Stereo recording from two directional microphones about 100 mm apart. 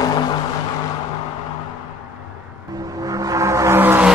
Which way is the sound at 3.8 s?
20° right (ahead or behind).